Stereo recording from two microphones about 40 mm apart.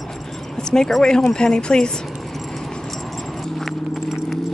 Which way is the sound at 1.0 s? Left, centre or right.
Centre.